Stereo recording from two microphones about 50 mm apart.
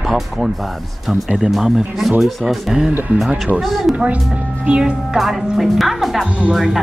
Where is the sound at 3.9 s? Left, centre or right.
Right.